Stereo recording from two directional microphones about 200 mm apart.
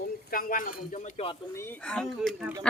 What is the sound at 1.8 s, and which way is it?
Speech, 5° left (ahead or behind).